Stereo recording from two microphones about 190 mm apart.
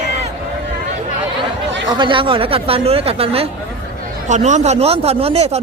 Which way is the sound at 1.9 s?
25° right (ahead or behind).